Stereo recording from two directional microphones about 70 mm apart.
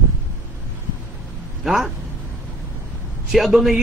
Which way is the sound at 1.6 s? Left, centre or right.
Centre.